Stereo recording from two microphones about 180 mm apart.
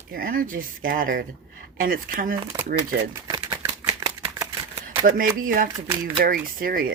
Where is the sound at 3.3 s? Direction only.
25° right (ahead or behind).